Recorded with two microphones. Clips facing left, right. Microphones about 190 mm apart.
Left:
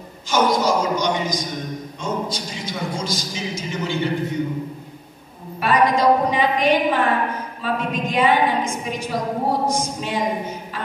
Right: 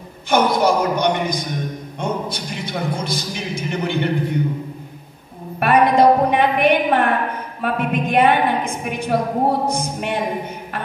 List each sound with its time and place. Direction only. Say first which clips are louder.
0.3 s a man's voice: right 2 dB; 60° right (ahead or behind)
5.6 s a sound: right 4 dB; 60° right (ahead or behind)
7.6 s a woman's voice: right 3 dB; 60° right (ahead or behind)